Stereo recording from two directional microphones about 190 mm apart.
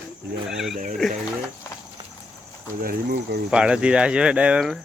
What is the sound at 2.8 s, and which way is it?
Speech, 50° right (ahead or behind).